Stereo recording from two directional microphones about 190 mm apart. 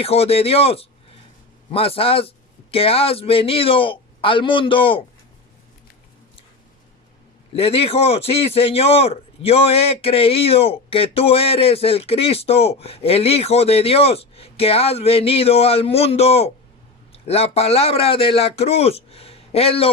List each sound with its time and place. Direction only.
0.0 s a man's voice: 30° left (ahead or behind)
7.5 s a man's voice: 30° left (ahead or behind)